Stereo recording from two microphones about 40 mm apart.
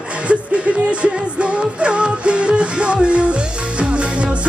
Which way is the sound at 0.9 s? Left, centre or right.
Right.